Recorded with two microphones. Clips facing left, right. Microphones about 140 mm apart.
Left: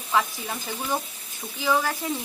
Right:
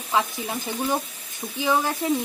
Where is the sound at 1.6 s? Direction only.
20° right (ahead or behind).